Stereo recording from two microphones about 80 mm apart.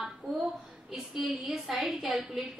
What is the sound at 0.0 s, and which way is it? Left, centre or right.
A woman's voice, centre.